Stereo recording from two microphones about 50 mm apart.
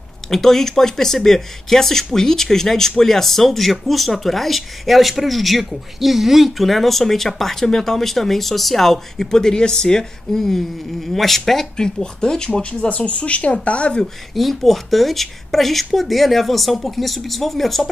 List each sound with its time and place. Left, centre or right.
0.3 s speech: centre
12.8 s speech: left
14.3 s speech: centre